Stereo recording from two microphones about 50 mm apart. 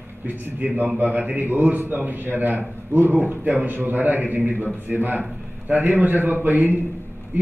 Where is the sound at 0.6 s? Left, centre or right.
Right.